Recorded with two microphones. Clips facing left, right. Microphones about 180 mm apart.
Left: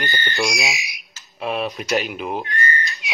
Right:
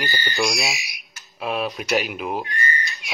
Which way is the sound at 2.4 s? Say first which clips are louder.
Left 3 dB; 15° right (ahead or behind).